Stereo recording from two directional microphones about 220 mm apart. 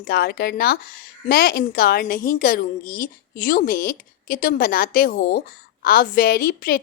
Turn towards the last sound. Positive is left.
turn(degrees=40)  # may be behind; listen again after turning